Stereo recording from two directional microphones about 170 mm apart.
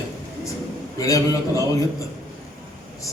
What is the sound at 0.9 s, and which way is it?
Speech, 20° left (ahead or behind).